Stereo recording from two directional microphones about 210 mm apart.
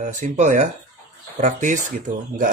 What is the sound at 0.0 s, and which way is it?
Speech, 35° right (ahead or behind).